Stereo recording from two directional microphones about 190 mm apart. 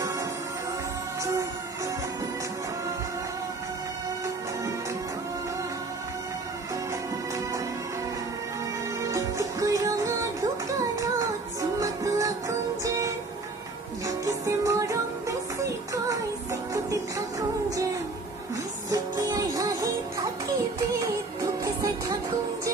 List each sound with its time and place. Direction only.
9.0 s music: 15° right (ahead or behind)
11.8 s music: 15° right (ahead or behind)
18.9 s music: 20° right (ahead or behind)
21.4 s music: 15° right (ahead or behind)